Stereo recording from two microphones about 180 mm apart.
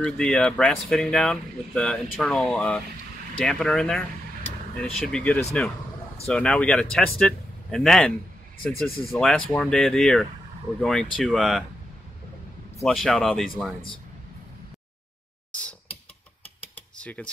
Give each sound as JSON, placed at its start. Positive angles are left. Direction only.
{"t": 0.0, "sound": "speech", "side_deg": 5}
{"t": 5.0, "sound": "speech", "side_deg": 5}
{"t": 9.2, "sound": "speech", "side_deg": 5}
{"t": 12.8, "sound": "speech", "side_deg": 0}
{"t": 16.9, "sound": "computer keyboard", "side_deg": 5}